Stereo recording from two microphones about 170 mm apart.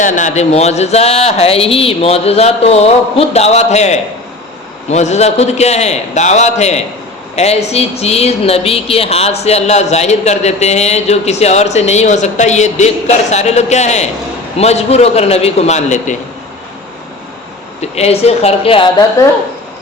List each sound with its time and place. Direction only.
0.0 s speech: 45° left (ahead or behind)
17.7 s speech: 40° left (ahead or behind)